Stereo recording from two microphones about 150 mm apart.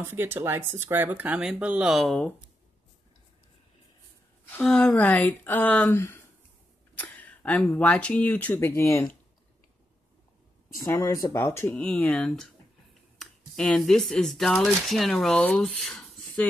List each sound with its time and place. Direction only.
0.0 s speech: 15° right (ahead or behind)
4.5 s speech: 5° left (ahead or behind)
10.7 s speech: 20° left (ahead or behind); by 16.4 s 5° left (ahead or behind)